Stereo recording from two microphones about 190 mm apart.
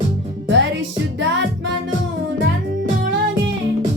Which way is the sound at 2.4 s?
70° right (ahead or behind).